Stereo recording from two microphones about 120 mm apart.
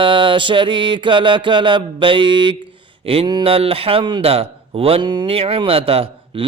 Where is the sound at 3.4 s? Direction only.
55° right (ahead or behind).